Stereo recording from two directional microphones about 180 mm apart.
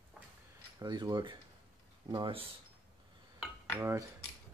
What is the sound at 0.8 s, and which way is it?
Speech, 25° right (ahead or behind).